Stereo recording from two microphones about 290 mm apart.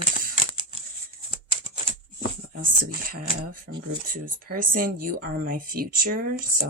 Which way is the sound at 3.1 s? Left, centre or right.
Right.